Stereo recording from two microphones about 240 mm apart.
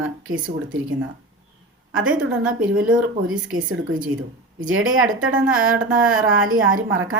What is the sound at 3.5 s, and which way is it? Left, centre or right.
A woman's voice, right.